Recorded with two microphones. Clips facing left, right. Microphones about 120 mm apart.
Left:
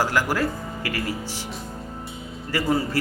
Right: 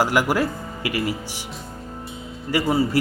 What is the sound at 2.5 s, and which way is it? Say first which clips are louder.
Speech: right 3 dB; 15° right (ahead or behind).